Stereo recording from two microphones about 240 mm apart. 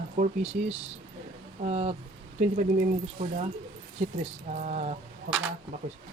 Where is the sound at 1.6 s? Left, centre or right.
Right.